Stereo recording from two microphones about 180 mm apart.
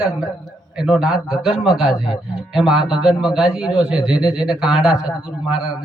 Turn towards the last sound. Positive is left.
turn(degrees=-5)  # may be behind; listen again after turning